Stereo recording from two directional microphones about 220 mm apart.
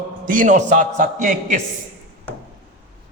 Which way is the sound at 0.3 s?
35° right (ahead or behind).